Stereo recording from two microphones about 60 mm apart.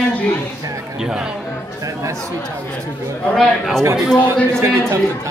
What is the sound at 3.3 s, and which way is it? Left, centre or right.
Speech, centre.